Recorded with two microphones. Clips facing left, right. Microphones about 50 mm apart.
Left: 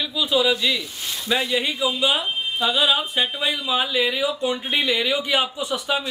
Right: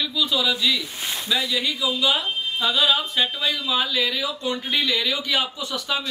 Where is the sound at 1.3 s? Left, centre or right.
Left.